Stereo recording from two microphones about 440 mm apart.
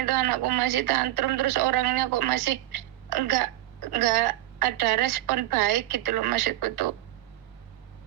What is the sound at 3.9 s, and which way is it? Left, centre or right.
Speech, right.